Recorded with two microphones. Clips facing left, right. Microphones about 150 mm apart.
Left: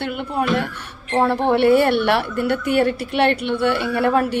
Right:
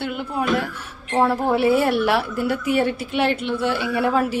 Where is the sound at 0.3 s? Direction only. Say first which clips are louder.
Left 2 dB; centre (ahead or behind).